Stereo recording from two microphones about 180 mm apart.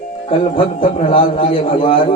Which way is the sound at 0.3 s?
35° left (ahead or behind).